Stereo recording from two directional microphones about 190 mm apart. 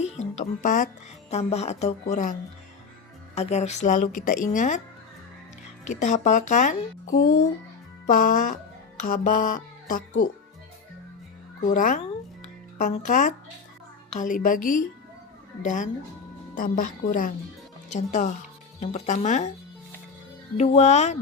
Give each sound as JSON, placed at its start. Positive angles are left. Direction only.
{"t": 0.0, "sound": "speech", "side_deg": 40}
{"t": 3.3, "sound": "speech", "side_deg": 35}
{"t": 5.8, "sound": "speech", "side_deg": 40}
{"t": 8.0, "sound": "music", "side_deg": 45}
{"t": 11.7, "sound": "music", "side_deg": 45}
{"t": 15.6, "sound": "speech", "side_deg": 40}
{"t": 16.6, "sound": "music", "side_deg": 45}
{"t": 17.8, "sound": "speech", "side_deg": 40}
{"t": 20.6, "sound": "speech", "side_deg": 35}